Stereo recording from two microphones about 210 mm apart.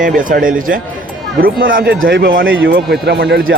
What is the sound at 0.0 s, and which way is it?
Speech, 40° right (ahead or behind).